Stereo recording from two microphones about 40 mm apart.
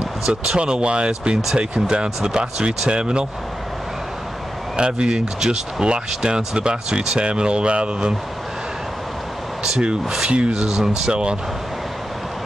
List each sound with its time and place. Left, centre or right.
0.0 s speech: right
4.7 s speech: right
9.6 s speech: centre